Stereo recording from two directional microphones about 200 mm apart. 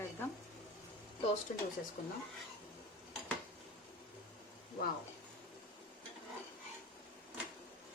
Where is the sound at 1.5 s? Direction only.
40° left (ahead or behind).